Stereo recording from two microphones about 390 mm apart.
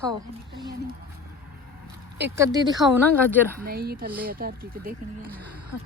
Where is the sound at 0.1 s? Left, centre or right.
Centre.